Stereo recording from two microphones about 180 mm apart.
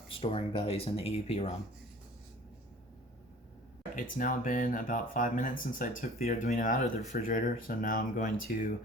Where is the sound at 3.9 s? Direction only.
50° left (ahead or behind).